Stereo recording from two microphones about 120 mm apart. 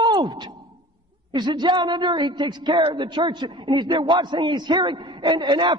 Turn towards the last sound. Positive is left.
turn(degrees=-40)  # may be behind; listen again after turning